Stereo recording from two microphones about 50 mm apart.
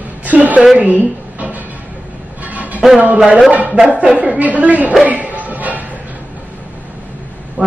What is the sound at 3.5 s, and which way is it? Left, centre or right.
A woman's voice, right.